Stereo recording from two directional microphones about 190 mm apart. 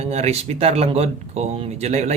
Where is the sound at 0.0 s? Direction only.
35° right (ahead or behind).